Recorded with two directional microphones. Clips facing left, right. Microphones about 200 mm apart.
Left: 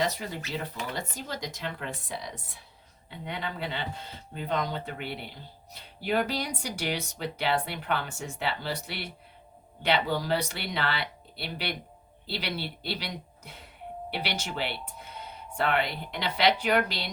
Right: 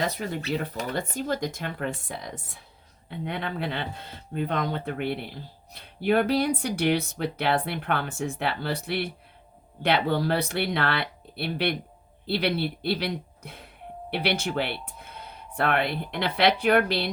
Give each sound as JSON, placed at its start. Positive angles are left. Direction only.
{"t": 0.8, "sound": "speech", "side_deg": -55}